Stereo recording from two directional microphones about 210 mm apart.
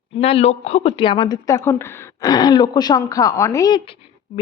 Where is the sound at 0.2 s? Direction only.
30° left (ahead or behind).